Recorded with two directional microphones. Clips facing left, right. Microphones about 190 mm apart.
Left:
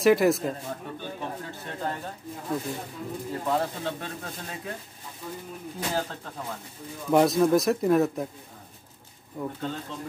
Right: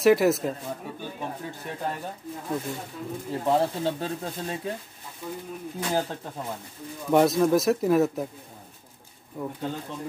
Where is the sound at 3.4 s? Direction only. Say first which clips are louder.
Right 5 dB; 30° right (ahead or behind).